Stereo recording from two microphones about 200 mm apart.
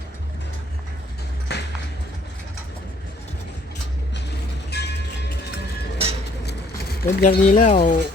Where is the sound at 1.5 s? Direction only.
55° left (ahead or behind).